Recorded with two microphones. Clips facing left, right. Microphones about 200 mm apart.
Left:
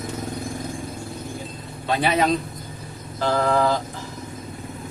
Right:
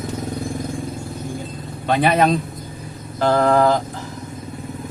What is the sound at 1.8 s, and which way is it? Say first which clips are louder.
A man's voice: right 4 dB; 55° right (ahead or behind).